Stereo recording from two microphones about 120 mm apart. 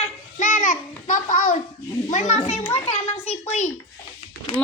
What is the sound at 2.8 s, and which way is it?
Speech, 60° left (ahead or behind).